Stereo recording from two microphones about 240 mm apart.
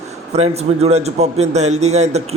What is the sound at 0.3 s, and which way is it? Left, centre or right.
A man's voice, right.